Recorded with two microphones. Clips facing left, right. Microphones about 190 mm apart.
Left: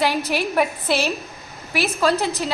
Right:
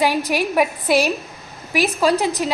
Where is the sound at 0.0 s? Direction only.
10° right (ahead or behind).